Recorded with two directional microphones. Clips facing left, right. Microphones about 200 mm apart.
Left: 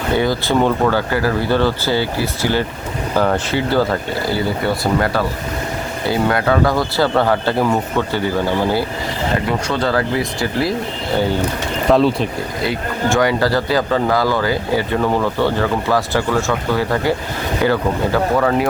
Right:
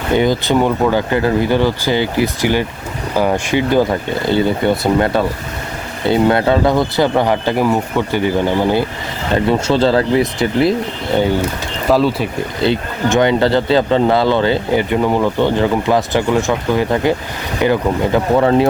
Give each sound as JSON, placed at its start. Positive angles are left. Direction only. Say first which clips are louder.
{"t": 0.1, "sound": "speech", "louder": "right 3 dB", "side_deg": -20}
{"t": 11.9, "sound": "speech", "louder": "even", "side_deg": -5}
{"t": 12.6, "sound": "speech", "louder": "right 4 dB", "side_deg": -25}